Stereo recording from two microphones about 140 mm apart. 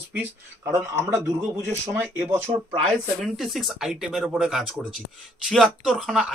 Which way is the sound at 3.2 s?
Centre (ahead or behind).